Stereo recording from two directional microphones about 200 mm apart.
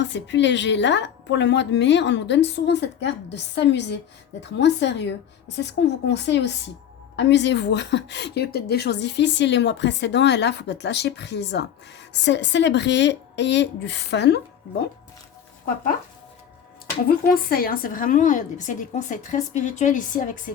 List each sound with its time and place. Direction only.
0.0 s a woman's voice: 60° left (ahead or behind)
15.6 s speech: 45° left (ahead or behind)
17.1 s a woman's voice: 50° left (ahead or behind)